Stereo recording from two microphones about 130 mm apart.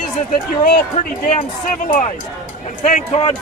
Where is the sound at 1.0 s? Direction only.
60° left (ahead or behind).